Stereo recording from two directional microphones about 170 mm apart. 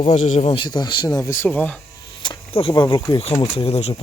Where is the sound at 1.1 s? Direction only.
15° left (ahead or behind).